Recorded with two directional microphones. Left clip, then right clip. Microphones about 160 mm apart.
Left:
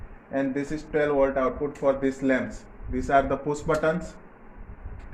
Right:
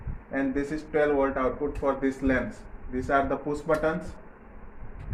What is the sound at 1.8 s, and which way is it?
Speech, 35° left (ahead or behind).